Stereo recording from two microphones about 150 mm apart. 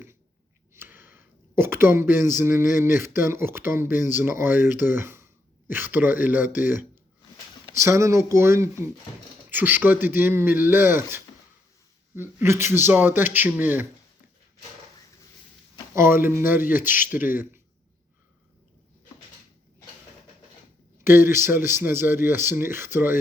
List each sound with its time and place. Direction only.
0.7 s speech: 15° right (ahead or behind)
16.0 s speech: 15° right (ahead or behind)
21.0 s speech: 15° right (ahead or behind)